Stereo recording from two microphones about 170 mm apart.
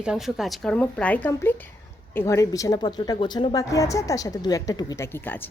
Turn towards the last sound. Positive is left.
turn(degrees=10)  # may be behind; listen again after turning